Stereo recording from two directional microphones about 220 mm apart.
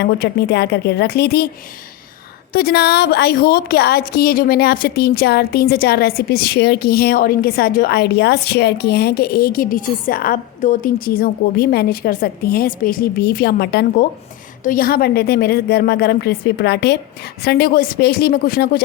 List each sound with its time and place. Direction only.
0.0 s a woman's voice: 50° left (ahead or behind)
2.5 s a woman's voice: 45° left (ahead or behind)